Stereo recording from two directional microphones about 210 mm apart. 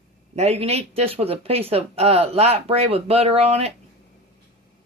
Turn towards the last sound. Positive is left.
turn(degrees=-30)  # may be behind; listen again after turning